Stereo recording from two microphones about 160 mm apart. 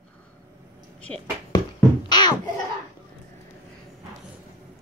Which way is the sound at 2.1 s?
25° left (ahead or behind).